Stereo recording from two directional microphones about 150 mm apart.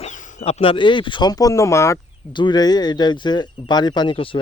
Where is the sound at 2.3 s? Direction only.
30° left (ahead or behind).